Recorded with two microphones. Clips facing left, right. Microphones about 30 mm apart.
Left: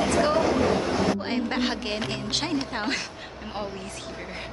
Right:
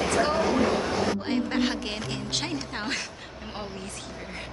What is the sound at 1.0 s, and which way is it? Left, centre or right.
A woman's voice, centre.